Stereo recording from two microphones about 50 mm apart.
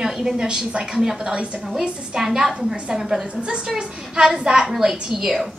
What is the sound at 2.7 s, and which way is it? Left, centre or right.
A woman's voice, right.